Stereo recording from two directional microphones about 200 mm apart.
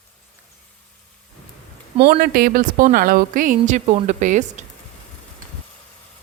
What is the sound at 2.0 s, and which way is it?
Speech, 45° right (ahead or behind).